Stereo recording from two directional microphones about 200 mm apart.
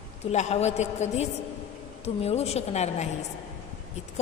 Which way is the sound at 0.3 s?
35° left (ahead or behind).